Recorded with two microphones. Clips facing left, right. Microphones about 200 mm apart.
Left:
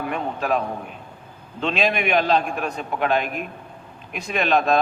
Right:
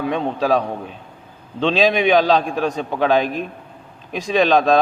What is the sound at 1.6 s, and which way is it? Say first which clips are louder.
A man's voice: right 6 dB; 90° right.